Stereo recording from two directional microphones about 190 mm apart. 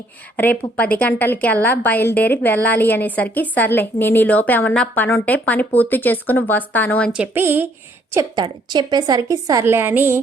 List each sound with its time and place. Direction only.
0.8 s a woman's voice: 10° left (ahead or behind)
7.1 s a woman's voice: 10° right (ahead or behind)